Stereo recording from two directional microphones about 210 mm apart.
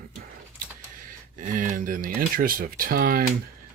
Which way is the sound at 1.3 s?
40° right (ahead or behind).